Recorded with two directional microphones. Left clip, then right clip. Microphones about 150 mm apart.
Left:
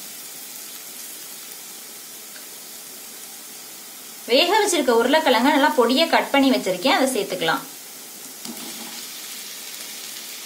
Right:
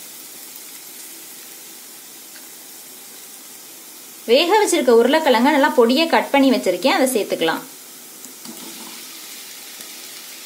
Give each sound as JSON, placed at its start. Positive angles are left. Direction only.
{"t": 4.3, "sound": "a woman's voice", "side_deg": -50}